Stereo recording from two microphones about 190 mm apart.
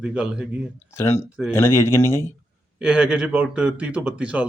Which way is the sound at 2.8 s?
5° right (ahead or behind).